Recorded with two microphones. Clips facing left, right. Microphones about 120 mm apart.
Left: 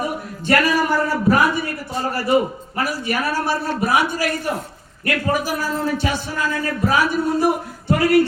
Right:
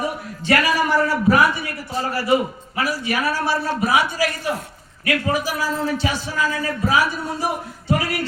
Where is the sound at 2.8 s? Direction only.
50° left (ahead or behind).